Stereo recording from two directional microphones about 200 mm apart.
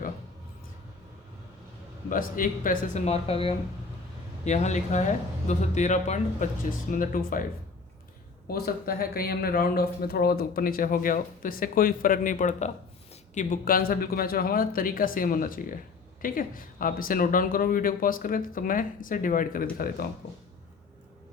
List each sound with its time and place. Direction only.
2.0 s a man's voice: 45° left (ahead or behind)
8.4 s a man's voice: 50° left (ahead or behind)